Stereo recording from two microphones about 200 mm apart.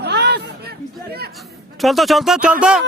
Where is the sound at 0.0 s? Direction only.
55° right (ahead or behind).